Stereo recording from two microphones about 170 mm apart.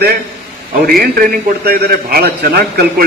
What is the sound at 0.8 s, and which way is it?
A man's voice, 55° right (ahead or behind).